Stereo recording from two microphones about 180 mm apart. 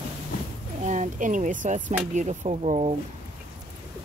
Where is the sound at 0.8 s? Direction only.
40° right (ahead or behind).